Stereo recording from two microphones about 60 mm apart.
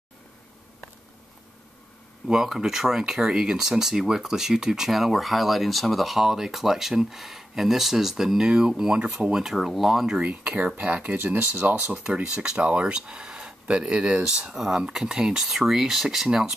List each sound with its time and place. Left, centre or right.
2.2 s speech: centre
10.3 s speech: right; by 16.5 s centre